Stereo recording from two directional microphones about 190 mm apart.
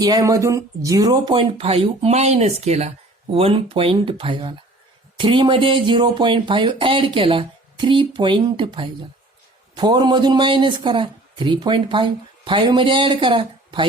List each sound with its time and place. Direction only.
0.0 s speech: 20° right (ahead or behind)